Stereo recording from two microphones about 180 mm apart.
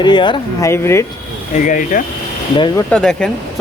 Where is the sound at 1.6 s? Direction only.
45° left (ahead or behind).